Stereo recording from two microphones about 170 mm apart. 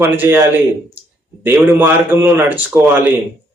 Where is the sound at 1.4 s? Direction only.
10° right (ahead or behind).